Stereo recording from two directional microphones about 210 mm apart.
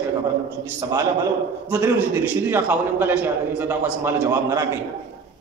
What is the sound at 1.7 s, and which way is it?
A man's voice, 10° right (ahead or behind).